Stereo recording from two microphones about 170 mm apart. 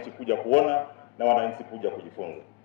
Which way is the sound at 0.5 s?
15° left (ahead or behind).